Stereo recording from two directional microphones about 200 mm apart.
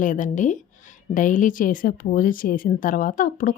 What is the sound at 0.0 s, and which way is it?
A woman's voice, 40° left (ahead or behind).